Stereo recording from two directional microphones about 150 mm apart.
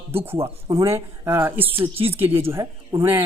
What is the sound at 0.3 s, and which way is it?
Speech, 15° right (ahead or behind).